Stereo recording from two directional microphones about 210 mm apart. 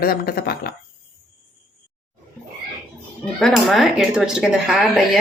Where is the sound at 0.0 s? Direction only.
45° left (ahead or behind).